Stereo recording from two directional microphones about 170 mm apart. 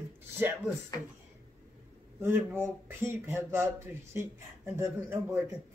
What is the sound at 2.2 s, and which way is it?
Speech, 15° right (ahead or behind).